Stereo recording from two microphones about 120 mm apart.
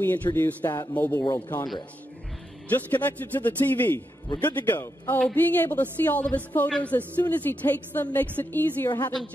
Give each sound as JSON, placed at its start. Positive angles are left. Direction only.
{"t": 0.0, "sound": "a woman's voice", "side_deg": 15}
{"t": 2.7, "sound": "a woman's voice", "side_deg": 15}